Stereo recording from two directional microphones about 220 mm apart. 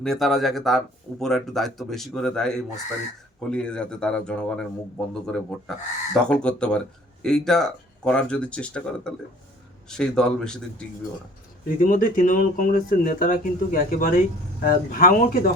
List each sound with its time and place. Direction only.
0.0 s speech: centre (ahead or behind)
11.8 s speech: 40° left (ahead or behind)